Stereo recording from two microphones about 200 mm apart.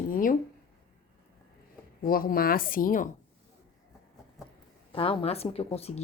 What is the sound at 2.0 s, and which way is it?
Speech, 45° left (ahead or behind).